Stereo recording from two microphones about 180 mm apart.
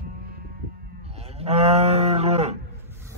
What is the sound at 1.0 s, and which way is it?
Cattle, 35° right (ahead or behind).